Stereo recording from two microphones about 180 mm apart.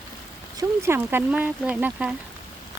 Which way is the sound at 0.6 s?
15° right (ahead or behind).